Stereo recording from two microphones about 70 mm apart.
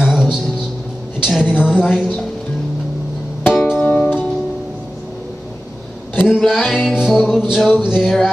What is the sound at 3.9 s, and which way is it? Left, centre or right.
Music, left.